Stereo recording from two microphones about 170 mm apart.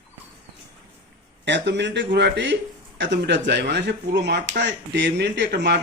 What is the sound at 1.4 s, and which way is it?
Speech, 90° right.